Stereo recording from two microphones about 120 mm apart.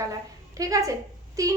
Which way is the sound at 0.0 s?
30° right (ahead or behind).